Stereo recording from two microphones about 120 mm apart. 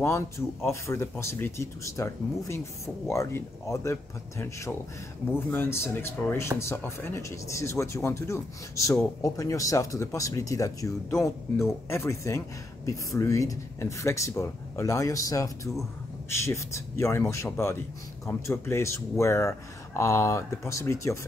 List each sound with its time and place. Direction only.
0.7 s speech: 20° left (ahead or behind)